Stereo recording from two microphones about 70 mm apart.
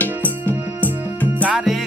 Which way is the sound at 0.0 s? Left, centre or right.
Left.